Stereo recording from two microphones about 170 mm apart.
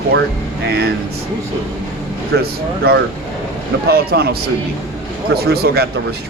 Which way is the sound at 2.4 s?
70° right (ahead or behind).